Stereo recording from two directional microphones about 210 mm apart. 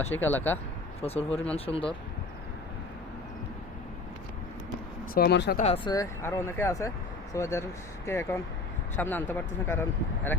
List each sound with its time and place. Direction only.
0.1 s speech: 10° left (ahead or behind)
1.0 s speech: 30° left (ahead or behind)
5.1 s speech: 50° left (ahead or behind)
5.5 s speech: 30° left (ahead or behind); by 9.8 s 10° left (ahead or behind)